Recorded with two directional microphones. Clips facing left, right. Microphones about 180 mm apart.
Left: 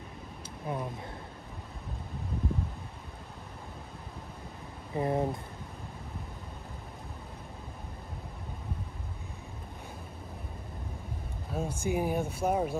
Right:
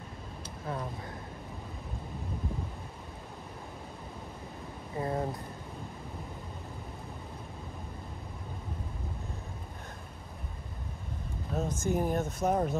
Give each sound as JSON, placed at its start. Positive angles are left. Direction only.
{"t": 0.7, "sound": "speech", "side_deg": 15}
{"t": 4.9, "sound": "speech", "side_deg": 20}
{"t": 11.5, "sound": "speech", "side_deg": 10}